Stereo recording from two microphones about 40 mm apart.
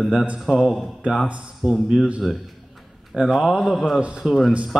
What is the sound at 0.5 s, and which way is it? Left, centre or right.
A man's voice, centre.